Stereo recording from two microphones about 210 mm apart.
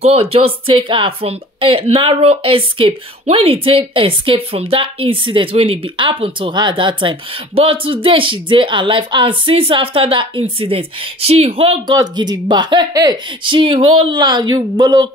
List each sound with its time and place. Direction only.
0.0 s speech: 30° right (ahead or behind)